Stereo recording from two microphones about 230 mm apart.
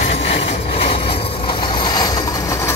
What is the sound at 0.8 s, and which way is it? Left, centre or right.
Train, left.